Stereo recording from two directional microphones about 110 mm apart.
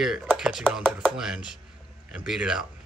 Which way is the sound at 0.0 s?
5° right (ahead or behind).